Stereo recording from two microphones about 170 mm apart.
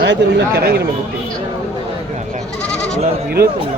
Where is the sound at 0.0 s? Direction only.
90° right; by 0.8 s 70° right (ahead or behind).